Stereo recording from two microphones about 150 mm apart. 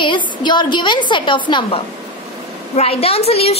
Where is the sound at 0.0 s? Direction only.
30° left (ahead or behind).